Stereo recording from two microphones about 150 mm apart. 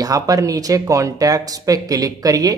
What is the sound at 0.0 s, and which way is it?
Speech, 25° right (ahead or behind).